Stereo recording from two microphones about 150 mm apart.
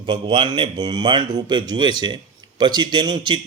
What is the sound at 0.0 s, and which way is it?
A man's voice, 30° right (ahead or behind).